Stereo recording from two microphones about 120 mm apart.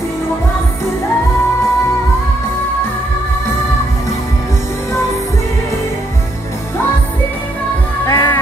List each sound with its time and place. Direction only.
8.1 s music: 30° left (ahead or behind)